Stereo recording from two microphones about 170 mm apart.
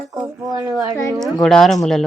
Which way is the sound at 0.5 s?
20° right (ahead or behind).